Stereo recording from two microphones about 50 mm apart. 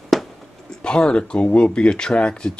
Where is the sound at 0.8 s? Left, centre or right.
Centre.